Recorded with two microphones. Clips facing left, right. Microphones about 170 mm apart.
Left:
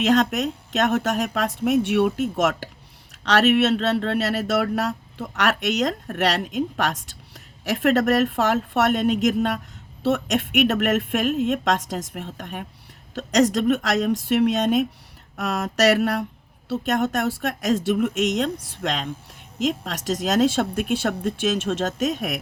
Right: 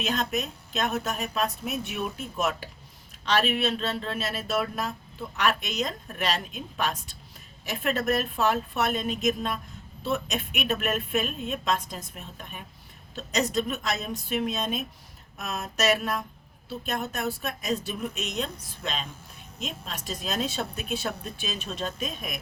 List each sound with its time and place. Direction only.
0.0 s speech: 80° left